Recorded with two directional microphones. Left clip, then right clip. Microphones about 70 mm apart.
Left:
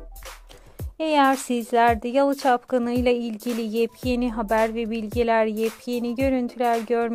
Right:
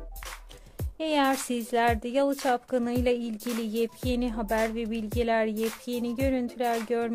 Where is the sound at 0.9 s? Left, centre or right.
Left.